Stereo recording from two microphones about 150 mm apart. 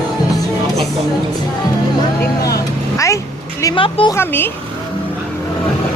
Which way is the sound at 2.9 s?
20° left (ahead or behind).